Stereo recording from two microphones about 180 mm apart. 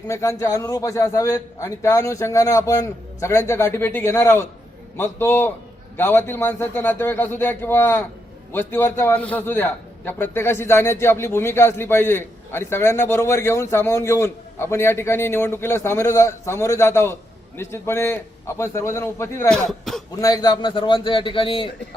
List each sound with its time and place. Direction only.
0.1 s a man's voice: 15° left (ahead or behind)
20.1 s a man's voice: 20° left (ahead or behind)